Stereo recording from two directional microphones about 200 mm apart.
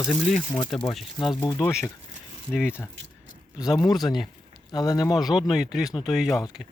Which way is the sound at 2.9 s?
70° right (ahead or behind).